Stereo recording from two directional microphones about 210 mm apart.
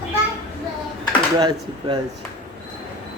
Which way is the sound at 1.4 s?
20° right (ahead or behind).